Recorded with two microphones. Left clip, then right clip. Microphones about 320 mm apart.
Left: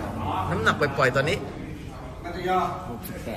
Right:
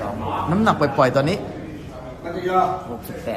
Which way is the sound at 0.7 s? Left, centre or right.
Centre.